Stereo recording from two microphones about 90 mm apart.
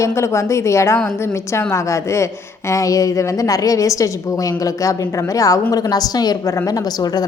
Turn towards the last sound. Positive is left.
turn(degrees=45)  # may be behind; listen again after turning